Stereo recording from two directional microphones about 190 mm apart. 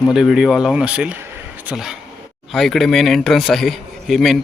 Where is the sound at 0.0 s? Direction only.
Centre (ahead or behind).